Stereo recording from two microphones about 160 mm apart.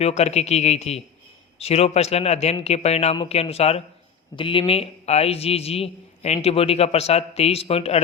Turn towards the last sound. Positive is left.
turn(degrees=40)  # may be behind; listen again after turning